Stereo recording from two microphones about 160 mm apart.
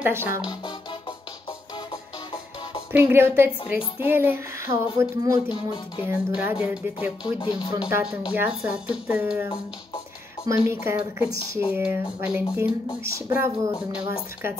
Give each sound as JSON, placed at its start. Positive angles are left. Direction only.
{"t": 0.0, "sound": "a woman's voice", "side_deg": -15}
{"t": 2.9, "sound": "a woman's voice", "side_deg": -15}
{"t": 7.2, "sound": "music", "side_deg": 30}
{"t": 8.0, "sound": "a woman's voice", "side_deg": -5}